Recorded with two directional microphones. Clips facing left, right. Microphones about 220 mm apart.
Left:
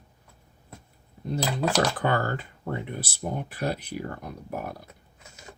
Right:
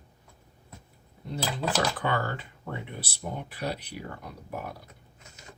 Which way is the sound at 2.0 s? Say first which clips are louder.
Left 4 dB; 45° left (ahead or behind).